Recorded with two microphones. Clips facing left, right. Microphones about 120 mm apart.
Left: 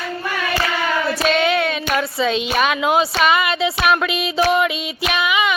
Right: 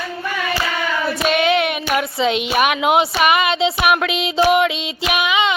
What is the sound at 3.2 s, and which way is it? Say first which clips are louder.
Music: right 1 dB; 20° right (ahead or behind).